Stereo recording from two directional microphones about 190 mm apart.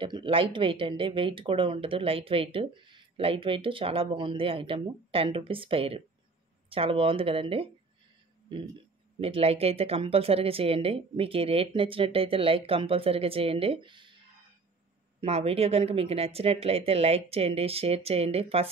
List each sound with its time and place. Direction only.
0.0 s speech: 25° right (ahead or behind)
9.2 s speech: 30° right (ahead or behind)
15.1 s speech: 30° right (ahead or behind)